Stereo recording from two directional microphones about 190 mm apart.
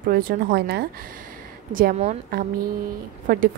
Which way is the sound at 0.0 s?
50° right (ahead or behind).